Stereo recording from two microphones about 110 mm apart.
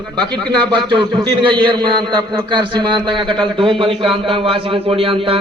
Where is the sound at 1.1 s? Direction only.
45° right (ahead or behind).